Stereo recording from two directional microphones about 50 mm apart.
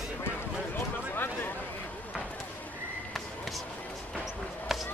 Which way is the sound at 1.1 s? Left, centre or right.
Left.